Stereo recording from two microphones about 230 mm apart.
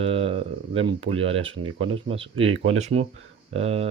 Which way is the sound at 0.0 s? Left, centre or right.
Right.